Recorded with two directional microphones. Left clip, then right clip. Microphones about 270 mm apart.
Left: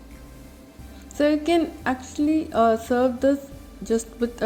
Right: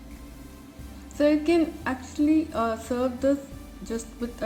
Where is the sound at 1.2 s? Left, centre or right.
Left.